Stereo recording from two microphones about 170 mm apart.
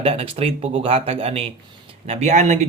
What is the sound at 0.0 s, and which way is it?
Speech, 35° right (ahead or behind).